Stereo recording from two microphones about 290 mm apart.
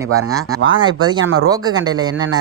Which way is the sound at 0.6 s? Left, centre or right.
Centre.